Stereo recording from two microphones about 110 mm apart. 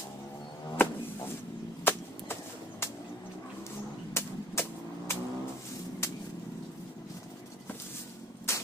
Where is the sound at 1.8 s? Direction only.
20° left (ahead or behind).